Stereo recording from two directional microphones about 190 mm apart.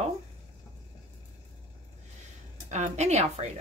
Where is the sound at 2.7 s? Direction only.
35° right (ahead or behind).